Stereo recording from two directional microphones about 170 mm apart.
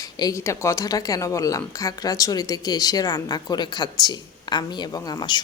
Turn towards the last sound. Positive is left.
turn(degrees=25)  # may be behind; listen again after turning